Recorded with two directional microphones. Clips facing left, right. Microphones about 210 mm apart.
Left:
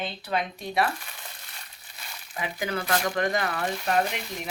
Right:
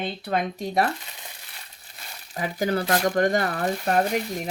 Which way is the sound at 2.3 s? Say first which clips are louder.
Right 6 dB; 40° right (ahead or behind).